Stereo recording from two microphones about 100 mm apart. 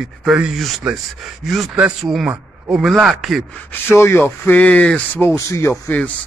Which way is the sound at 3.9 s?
25° left (ahead or behind).